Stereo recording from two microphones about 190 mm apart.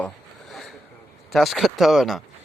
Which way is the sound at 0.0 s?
Centre (ahead or behind).